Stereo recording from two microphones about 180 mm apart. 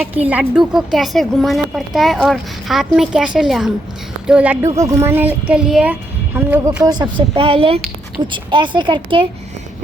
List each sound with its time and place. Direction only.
0.0 s a woman's voice: 10° right (ahead or behind); by 9.2 s 25° right (ahead or behind)